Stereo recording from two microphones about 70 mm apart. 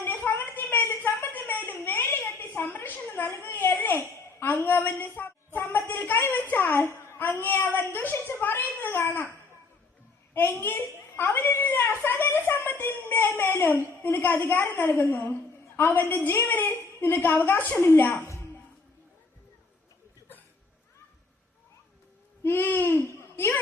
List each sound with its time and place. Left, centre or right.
0.0 s a sound: left
5.5 s a woman's voice: left
10.3 s a child's voice: left
22.4 s a child's voice: left